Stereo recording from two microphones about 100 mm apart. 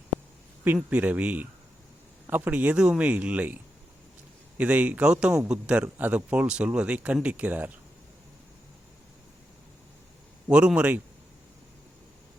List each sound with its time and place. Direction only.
0.9 s a man's voice: 15° right (ahead or behind)
10.5 s a man's voice: 10° right (ahead or behind)